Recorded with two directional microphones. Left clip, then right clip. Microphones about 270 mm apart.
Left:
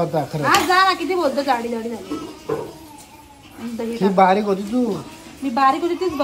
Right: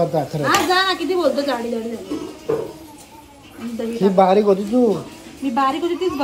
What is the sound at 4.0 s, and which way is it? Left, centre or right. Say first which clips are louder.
Speech: right 1 dB; centre.